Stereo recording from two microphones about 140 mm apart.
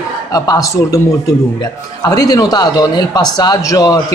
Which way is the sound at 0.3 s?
25° left (ahead or behind).